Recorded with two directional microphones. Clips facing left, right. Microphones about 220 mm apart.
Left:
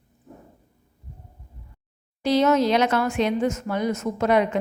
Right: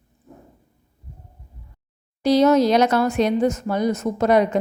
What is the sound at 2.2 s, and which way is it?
Speech, 40° right (ahead or behind).